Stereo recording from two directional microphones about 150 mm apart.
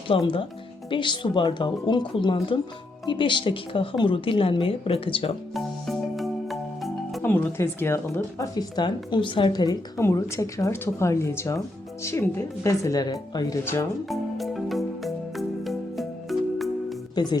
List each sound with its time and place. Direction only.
0.2 s a woman's voice: 35° left (ahead or behind)
5.5 s music: centre (ahead or behind)
7.2 s speech: 15° left (ahead or behind)
14.1 s music: centre (ahead or behind)
17.2 s speech: 30° left (ahead or behind)